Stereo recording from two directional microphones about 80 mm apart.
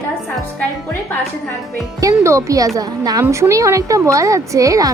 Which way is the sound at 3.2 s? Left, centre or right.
Right.